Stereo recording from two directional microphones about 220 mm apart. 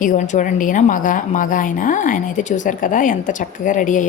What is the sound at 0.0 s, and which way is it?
A woman's voice, 35° left (ahead or behind).